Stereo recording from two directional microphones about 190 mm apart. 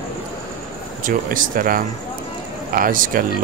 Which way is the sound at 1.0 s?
45° right (ahead or behind).